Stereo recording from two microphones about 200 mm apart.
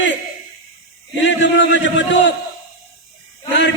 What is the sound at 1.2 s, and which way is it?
A man's voice, 65° left (ahead or behind).